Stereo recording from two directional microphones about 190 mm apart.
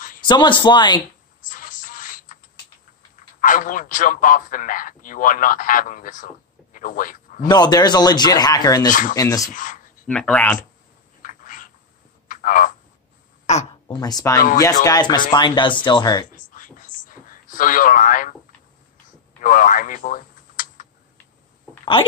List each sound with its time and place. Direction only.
0.2 s speech: 25° left (ahead or behind)
1.4 s music: 45° left (ahead or behind)
3.3 s a man's voice: 45° left (ahead or behind)
7.4 s speech: 20° left (ahead or behind)
9.5 s a man's voice: 45° left (ahead or behind)
10.0 s speech: 5° left (ahead or behind)
11.2 s a sound: 45° left (ahead or behind)
12.3 s frog: 45° left (ahead or behind)
13.8 s speech: 20° left (ahead or behind)
16.3 s a sound: 45° left (ahead or behind)
19.4 s typing: 45° left (ahead or behind)